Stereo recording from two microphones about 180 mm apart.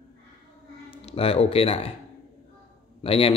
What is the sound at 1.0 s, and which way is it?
Speech, 35° left (ahead or behind).